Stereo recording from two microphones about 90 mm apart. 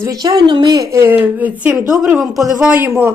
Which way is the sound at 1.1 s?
20° right (ahead or behind).